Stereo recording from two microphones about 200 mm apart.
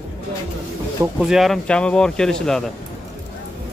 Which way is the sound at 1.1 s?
Centre (ahead or behind).